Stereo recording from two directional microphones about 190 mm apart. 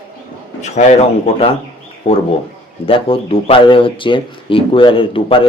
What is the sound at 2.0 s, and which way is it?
Speech, 30° left (ahead or behind).